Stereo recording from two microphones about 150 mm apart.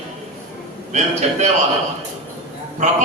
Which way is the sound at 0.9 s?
50° right (ahead or behind).